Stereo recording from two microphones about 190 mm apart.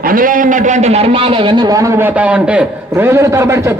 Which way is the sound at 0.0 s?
45° right (ahead or behind).